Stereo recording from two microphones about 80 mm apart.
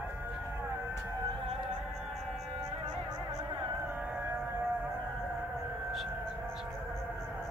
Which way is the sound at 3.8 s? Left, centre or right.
Right.